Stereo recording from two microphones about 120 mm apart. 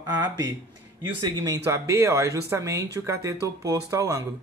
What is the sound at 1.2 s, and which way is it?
Speech, 35° right (ahead or behind).